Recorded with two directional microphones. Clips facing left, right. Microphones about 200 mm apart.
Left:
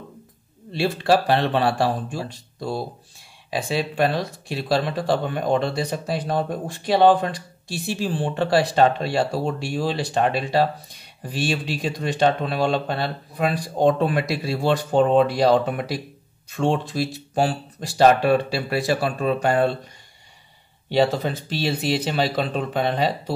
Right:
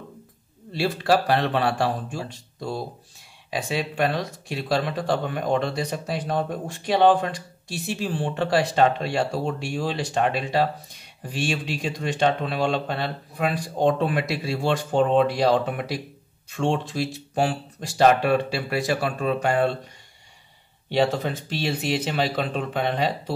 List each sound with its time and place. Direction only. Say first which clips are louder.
0.7 s speech: left 2 dB; 25° left (ahead or behind)
20.9 s speech: left 2 dB; 35° left (ahead or behind)